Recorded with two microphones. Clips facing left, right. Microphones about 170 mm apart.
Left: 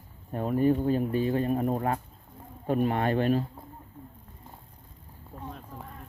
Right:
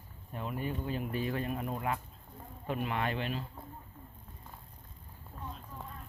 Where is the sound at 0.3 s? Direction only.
45° left (ahead or behind).